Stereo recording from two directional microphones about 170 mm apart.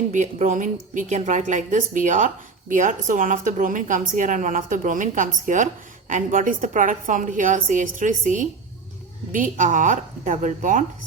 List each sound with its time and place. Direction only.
0.1 s a woman's voice: 45° right (ahead or behind)